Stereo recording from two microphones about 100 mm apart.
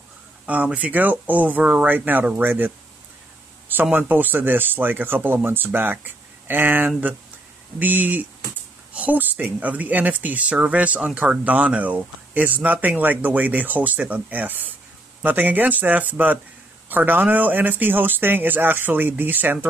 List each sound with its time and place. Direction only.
0.5 s speech: 15° right (ahead or behind)
3.9 s speech: 20° right (ahead or behind)